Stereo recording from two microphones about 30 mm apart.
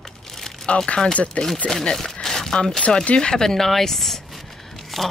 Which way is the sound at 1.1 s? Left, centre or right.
Left.